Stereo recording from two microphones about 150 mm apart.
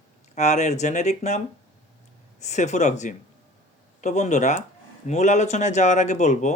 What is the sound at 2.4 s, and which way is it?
Speech, 50° left (ahead or behind).